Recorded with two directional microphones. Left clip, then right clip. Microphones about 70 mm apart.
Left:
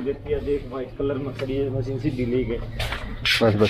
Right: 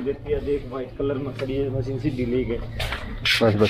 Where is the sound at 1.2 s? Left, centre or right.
Right.